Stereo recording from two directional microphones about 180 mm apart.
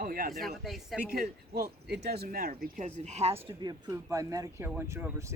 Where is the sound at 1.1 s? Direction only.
60° right (ahead or behind).